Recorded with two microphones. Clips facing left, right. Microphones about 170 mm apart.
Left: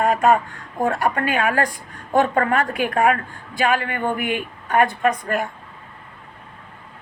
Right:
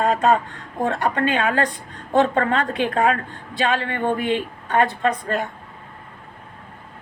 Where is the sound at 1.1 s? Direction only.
25° right (ahead or behind).